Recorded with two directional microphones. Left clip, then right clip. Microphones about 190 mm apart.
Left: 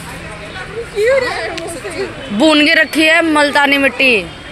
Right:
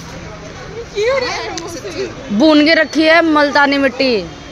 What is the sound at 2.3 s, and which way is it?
A man's voice, 15° right (ahead or behind).